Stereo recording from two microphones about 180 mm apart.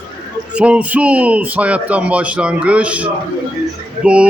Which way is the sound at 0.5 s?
5° right (ahead or behind).